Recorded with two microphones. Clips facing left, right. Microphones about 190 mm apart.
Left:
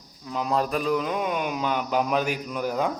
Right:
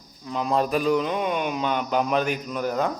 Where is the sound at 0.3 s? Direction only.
5° left (ahead or behind).